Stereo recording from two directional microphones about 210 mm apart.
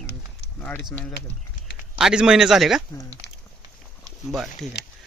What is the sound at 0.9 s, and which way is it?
Speech, 5° left (ahead or behind).